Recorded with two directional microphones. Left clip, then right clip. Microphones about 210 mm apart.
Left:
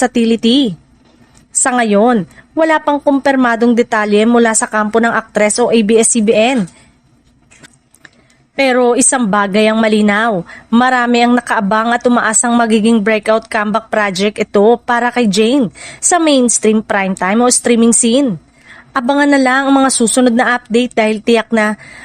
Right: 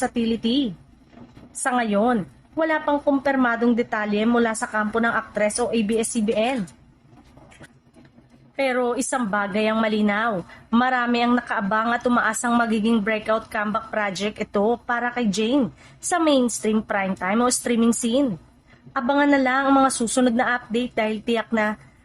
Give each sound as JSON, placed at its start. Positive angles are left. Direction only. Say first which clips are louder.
{"t": 0.0, "sound": "a woman's voice", "louder": "left 12 dB", "side_deg": 45}
{"t": 1.6, "sound": "a woman's voice", "louder": "left 10 dB", "side_deg": 45}
{"t": 8.5, "sound": "speech", "louder": "left 12 dB", "side_deg": 45}